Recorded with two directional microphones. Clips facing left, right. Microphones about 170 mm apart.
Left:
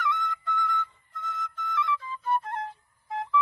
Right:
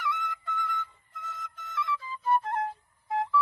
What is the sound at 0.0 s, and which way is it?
Flute, 10° right (ahead or behind).